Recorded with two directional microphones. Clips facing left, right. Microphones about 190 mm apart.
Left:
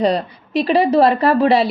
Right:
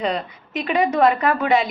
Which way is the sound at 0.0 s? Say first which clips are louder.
Left 7 dB; 35° left (ahead or behind).